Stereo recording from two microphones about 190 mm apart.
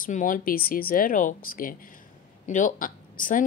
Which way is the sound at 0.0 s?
45° left (ahead or behind).